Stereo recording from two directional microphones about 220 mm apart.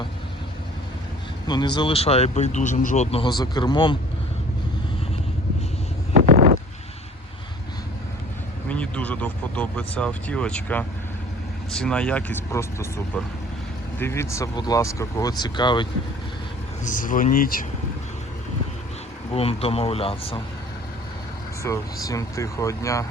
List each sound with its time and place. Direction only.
1.5 s speech: 20° left (ahead or behind)
6.1 s a sound: 40° right (ahead or behind)
8.7 s speech: 5° left (ahead or behind)
14.0 s speech: 10° left (ahead or behind)
16.8 s speech: 35° left (ahead or behind)
19.3 s speech: 25° left (ahead or behind)
21.6 s speech: 15° left (ahead or behind)